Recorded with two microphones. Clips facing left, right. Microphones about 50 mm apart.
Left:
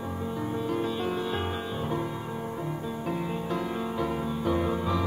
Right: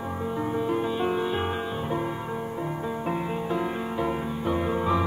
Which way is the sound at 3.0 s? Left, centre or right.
Centre.